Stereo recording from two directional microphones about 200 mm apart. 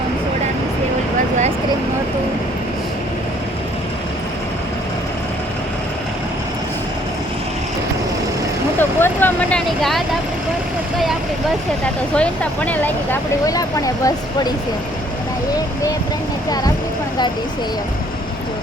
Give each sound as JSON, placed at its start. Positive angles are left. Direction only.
{"t": 8.8, "sound": "vehicle", "side_deg": 10}
{"t": 12.1, "sound": "speech", "side_deg": 5}